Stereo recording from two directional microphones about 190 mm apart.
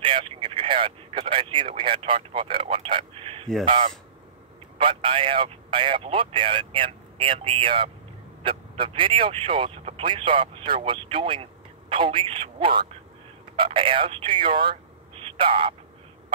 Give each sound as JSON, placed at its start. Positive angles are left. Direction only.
{"t": 0.0, "sound": "speech", "side_deg": -30}